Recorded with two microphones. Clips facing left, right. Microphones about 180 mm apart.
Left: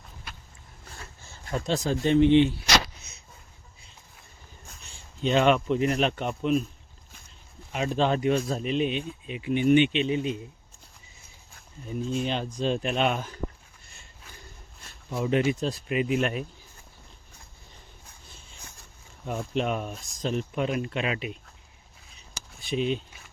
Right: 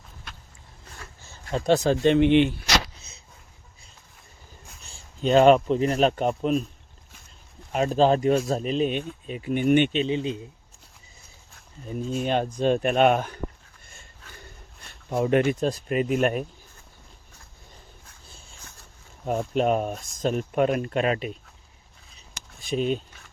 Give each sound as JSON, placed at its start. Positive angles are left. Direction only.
{"t": 1.6, "sound": "speech", "side_deg": -65}
{"t": 4.9, "sound": "speech", "side_deg": -40}
{"t": 7.7, "sound": "speech", "side_deg": -40}
{"t": 10.0, "sound": "a man's voice", "side_deg": -30}
{"t": 12.1, "sound": "speech", "side_deg": -50}
{"t": 15.1, "sound": "speech", "side_deg": -50}
{"t": 19.2, "sound": "speech", "side_deg": -45}
{"t": 22.7, "sound": "speech", "side_deg": -45}